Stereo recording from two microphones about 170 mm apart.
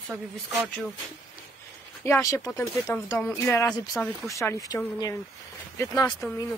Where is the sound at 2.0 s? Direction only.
15° left (ahead or behind).